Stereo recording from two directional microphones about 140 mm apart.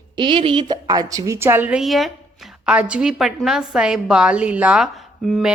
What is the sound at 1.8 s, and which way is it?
A woman's voice, centre (ahead or behind).